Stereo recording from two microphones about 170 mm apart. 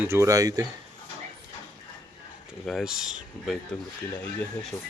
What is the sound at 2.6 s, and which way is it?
Speech, centre (ahead or behind).